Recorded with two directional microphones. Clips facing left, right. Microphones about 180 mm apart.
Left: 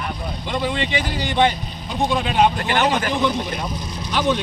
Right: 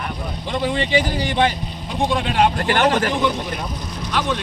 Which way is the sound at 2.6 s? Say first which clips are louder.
Right 2 dB; 50° right (ahead or behind).